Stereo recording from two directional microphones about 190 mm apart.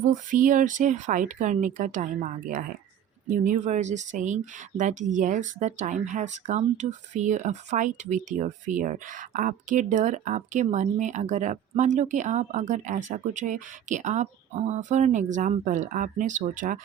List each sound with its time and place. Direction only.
0.1 s speech: 45° right (ahead or behind)